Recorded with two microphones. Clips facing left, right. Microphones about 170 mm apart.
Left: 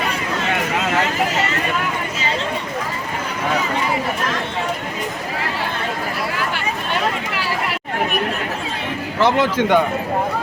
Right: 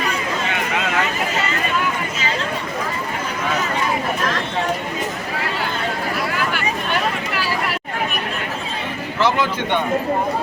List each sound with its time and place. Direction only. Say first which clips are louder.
9.2 s speech: left 3 dB; 70° left (ahead or behind)